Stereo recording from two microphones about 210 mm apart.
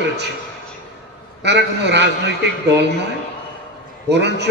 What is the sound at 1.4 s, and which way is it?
A man's voice, 55° right (ahead or behind).